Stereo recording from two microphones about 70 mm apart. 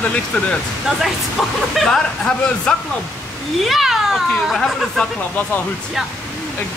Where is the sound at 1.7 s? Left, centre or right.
Centre.